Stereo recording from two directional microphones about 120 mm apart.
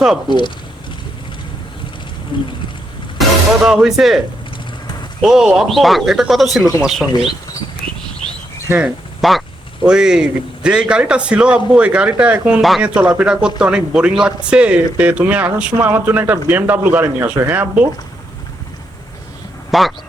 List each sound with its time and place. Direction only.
0.3 s speech: 40° left (ahead or behind)
2.3 s a sound: 45° left (ahead or behind)
3.2 s speech: 5° right (ahead or behind)
5.2 s speech: 5° right (ahead or behind)
9.2 s a man's voice: centre (ahead or behind)
19.7 s speech: centre (ahead or behind)